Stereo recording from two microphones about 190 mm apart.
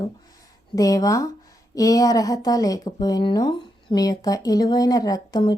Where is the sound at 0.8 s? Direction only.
20° left (ahead or behind).